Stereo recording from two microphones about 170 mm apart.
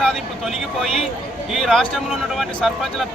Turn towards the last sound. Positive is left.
turn(degrees=0)  # may be behind; listen again after turning